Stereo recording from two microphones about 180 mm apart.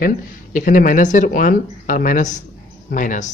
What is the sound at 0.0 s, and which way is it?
Speech, 45° left (ahead or behind).